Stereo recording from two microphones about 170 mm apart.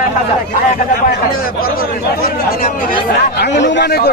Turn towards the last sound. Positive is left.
turn(degrees=70)  # may be behind; listen again after turning